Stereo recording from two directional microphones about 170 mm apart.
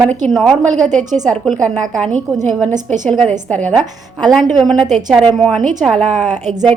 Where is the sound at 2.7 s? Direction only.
45° right (ahead or behind).